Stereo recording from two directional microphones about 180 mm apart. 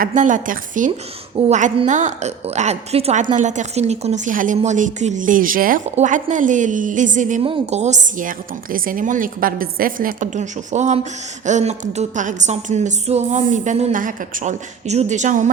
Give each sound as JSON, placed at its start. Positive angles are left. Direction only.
{"t": 0.0, "sound": "a woman's voice", "side_deg": -45}
{"t": 7.4, "sound": "a woman's voice", "side_deg": -35}